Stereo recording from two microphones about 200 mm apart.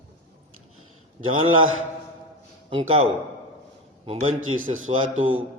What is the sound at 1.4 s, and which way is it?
Speech, 90° right.